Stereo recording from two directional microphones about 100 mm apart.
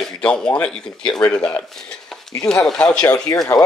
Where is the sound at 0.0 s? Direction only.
10° left (ahead or behind).